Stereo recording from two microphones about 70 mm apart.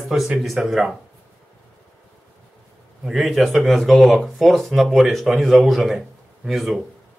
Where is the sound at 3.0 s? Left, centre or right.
Centre.